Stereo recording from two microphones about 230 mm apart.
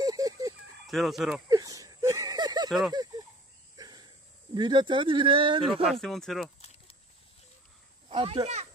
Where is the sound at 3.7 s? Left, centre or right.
Centre.